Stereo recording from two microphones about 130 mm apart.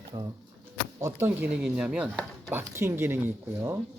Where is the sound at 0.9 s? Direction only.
20° right (ahead or behind).